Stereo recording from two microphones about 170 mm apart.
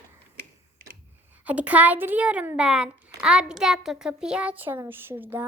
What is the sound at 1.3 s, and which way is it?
A child's voice, 10° right (ahead or behind).